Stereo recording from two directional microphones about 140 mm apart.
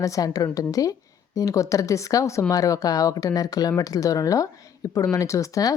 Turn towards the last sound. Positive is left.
turn(degrees=25)  # may be behind; listen again after turning